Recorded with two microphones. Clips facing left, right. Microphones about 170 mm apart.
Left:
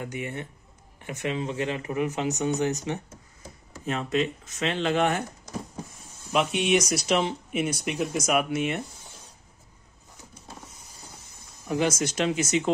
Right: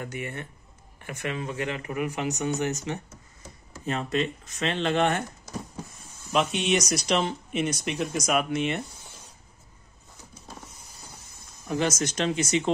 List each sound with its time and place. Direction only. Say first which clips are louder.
0.0 s speech: left 1 dB; 15° left (ahead or behind)
3.8 s speech: left 1 dB; centre (ahead or behind)
6.3 s speech: left 1 dB; 10° left (ahead or behind)
11.7 s speech: left 1 dB; 10° left (ahead or behind)